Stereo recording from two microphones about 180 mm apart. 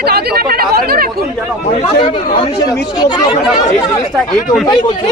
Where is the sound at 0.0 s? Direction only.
60° right (ahead or behind).